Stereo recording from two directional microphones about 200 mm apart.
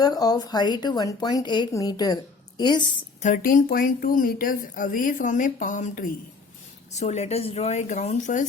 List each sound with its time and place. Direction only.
0.0 s a woman's voice: 20° left (ahead or behind)
3.2 s a woman's voice: 40° left (ahead or behind)